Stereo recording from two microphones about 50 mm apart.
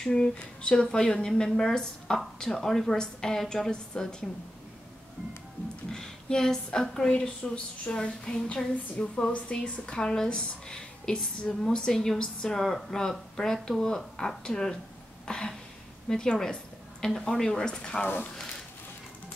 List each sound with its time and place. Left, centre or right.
0.0 s speech: centre
5.9 s speech: centre
15.2 s throat clearing: centre
16.1 s speech: centre
18.0 s speech: left
18.3 s a sound: centre